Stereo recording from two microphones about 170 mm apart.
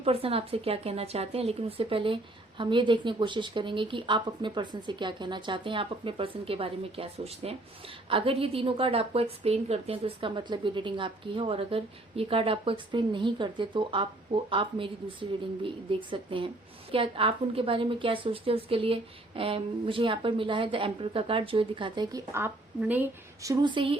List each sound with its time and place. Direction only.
0.0 s a woman's voice: 35° right (ahead or behind)
22.3 s a woman's voice: 15° right (ahead or behind); by 24.0 s 30° right (ahead or behind)